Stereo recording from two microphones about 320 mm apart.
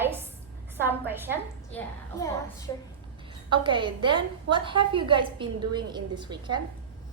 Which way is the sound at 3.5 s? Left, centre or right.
Centre.